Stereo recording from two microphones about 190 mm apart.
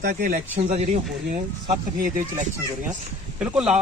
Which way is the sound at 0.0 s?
45° right (ahead or behind).